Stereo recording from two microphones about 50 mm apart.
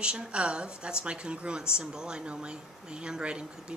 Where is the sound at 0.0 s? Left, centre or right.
Centre.